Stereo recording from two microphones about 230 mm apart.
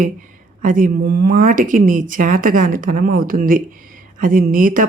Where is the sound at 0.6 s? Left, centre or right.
Right.